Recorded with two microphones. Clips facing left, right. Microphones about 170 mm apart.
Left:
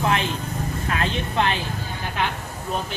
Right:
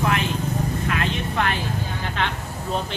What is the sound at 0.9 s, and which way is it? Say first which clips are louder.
Vehicle: even; 35° left (ahead or behind).